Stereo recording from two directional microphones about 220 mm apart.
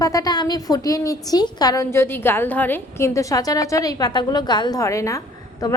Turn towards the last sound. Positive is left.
turn(degrees=15)  # may be behind; listen again after turning